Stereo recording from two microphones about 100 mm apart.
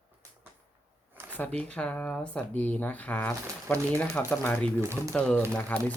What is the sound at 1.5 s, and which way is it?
Speech, 10° left (ahead or behind).